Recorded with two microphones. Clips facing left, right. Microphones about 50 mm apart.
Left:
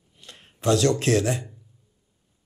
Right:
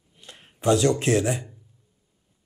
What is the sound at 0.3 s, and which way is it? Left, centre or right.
Speech, centre.